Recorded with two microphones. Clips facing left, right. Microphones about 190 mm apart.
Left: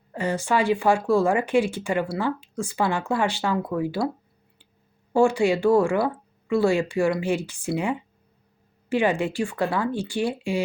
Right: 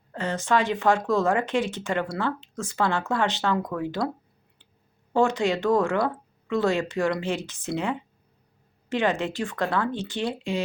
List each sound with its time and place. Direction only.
0.1 s speech: 10° left (ahead or behind)
5.1 s speech: 10° left (ahead or behind)